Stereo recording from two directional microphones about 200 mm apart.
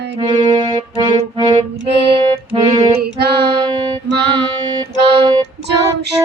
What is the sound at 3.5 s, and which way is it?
Music, 20° right (ahead or behind).